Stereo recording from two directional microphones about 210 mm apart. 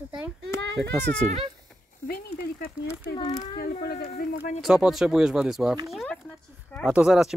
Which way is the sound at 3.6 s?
45° left (ahead or behind).